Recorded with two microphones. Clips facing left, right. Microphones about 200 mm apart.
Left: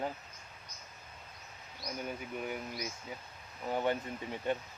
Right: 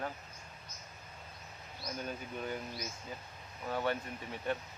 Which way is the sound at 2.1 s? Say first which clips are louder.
Left 1 dB; 10° left (ahead or behind).